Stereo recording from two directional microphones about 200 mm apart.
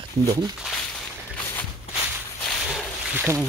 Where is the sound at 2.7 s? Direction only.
10° right (ahead or behind).